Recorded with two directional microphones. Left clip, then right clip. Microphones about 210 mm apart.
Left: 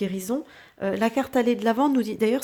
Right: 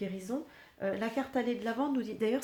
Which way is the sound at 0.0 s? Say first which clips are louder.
Left 9 dB; 45° left (ahead or behind).